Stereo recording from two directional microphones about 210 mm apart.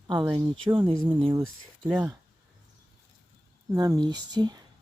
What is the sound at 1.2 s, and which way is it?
Speech, 25° right (ahead or behind).